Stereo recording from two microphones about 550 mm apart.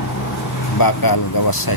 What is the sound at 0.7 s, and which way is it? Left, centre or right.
Speech, left.